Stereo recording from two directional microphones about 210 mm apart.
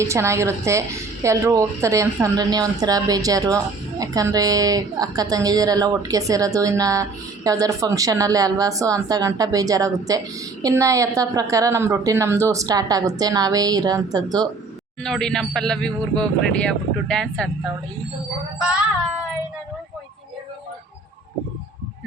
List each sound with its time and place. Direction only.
0.0 s a woman's voice: 15° right (ahead or behind)
15.0 s speech: 5° left (ahead or behind)